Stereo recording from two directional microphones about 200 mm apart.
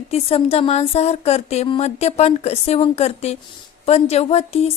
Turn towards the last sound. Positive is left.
turn(degrees=30)  # may be behind; listen again after turning